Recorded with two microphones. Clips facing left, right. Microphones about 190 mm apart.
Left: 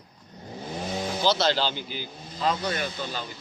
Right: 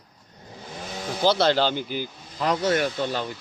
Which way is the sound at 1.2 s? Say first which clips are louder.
Right 5 dB; 55° right (ahead or behind).